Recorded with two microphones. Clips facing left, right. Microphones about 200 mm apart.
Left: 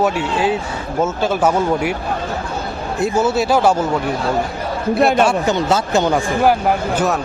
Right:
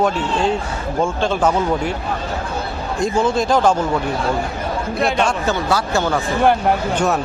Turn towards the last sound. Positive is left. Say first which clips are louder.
# even
turn(degrees=0)  # may be behind; listen again after turning